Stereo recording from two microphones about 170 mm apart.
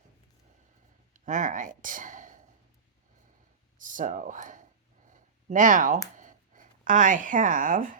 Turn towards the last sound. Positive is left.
turn(degrees=-50)  # may be behind; listen again after turning